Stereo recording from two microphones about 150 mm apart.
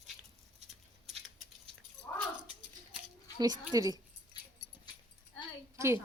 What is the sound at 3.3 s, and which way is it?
Speech, 25° right (ahead or behind).